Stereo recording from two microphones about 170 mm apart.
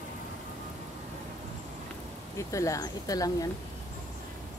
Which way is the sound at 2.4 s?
20° left (ahead or behind).